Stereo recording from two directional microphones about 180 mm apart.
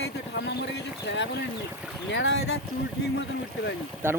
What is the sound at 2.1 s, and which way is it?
Speech, 90° left.